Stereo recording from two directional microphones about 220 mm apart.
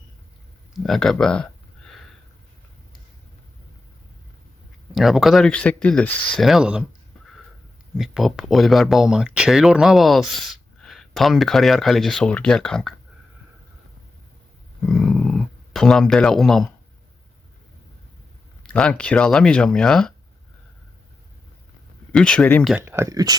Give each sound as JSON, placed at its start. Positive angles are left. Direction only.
{"t": 0.7, "sound": "speech", "side_deg": 0}
{"t": 4.9, "sound": "speech", "side_deg": 0}
{"t": 7.9, "sound": "speech", "side_deg": 0}
{"t": 14.8, "sound": "speech", "side_deg": 0}
{"t": 18.6, "sound": "speech", "side_deg": 5}
{"t": 22.1, "sound": "speech", "side_deg": 5}
{"t": 22.7, "sound": "speech", "side_deg": -10}